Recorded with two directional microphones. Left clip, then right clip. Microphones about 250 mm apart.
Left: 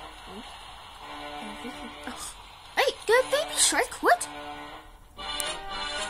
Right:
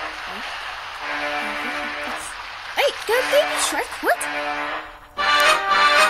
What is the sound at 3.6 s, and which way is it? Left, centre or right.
Speech, centre.